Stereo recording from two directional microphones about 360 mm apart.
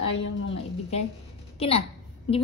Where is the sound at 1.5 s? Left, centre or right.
Centre.